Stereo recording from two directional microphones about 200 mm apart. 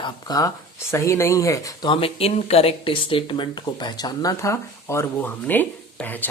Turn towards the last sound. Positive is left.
turn(degrees=10)  # may be behind; listen again after turning